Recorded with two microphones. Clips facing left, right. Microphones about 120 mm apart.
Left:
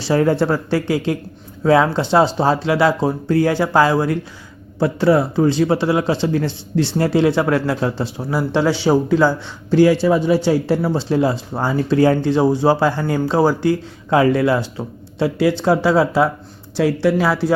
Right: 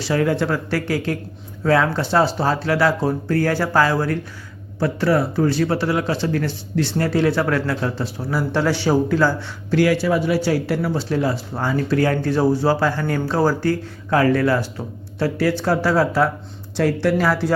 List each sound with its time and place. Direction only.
0.0 s speech: 30° left (ahead or behind); by 17.5 s 10° left (ahead or behind)